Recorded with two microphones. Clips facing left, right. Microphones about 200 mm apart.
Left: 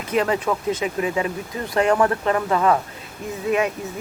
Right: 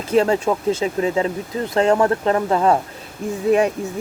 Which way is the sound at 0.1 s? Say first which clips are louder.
Right 4 dB; 30° right (ahead or behind).